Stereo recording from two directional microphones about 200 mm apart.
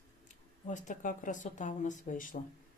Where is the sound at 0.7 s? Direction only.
40° left (ahead or behind).